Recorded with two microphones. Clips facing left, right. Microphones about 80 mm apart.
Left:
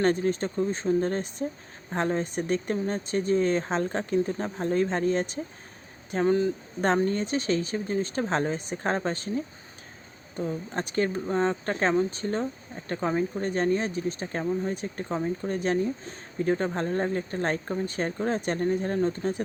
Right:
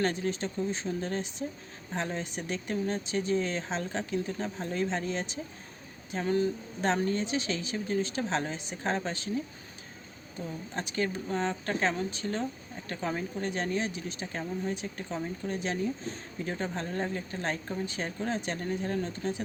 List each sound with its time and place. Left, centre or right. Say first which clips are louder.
0.0 s speech: left 6 dB; left
6.8 s speech: left 4 dB; left